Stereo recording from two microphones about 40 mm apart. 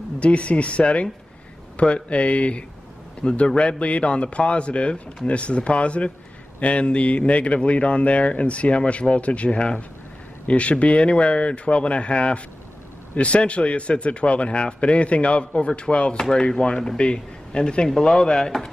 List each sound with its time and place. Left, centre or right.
0.2 s a man's voice: left
16.2 s a man's voice: centre
17.8 s speech: centre